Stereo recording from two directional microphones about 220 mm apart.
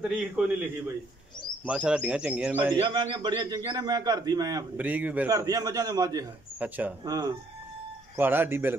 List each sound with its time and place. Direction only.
0.4 s speech: 5° right (ahead or behind)
1.7 s speech: 5° right (ahead or behind)
2.7 s a man's voice: 20° right (ahead or behind)